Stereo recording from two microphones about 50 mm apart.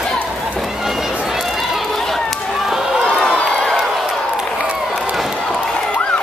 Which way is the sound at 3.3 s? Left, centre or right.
Centre.